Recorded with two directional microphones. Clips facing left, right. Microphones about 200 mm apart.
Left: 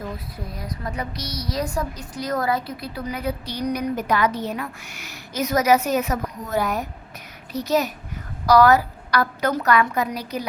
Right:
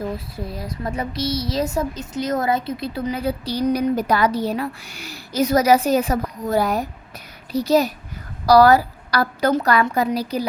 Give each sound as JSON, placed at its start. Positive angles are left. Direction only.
{"t": 0.3, "sound": "speech", "side_deg": -30}